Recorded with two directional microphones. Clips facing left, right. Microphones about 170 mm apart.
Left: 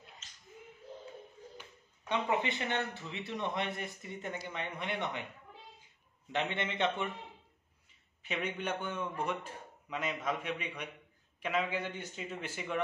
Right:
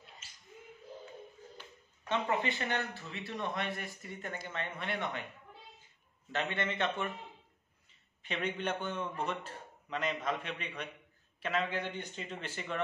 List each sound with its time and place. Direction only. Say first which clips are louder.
0.2 s a sound: even; 10° right (ahead or behind)
1.6 s speech: even; 15° left (ahead or behind)
6.3 s speech: even; 20° left (ahead or behind)
8.2 s a man's voice: right 1 dB; 10° left (ahead or behind)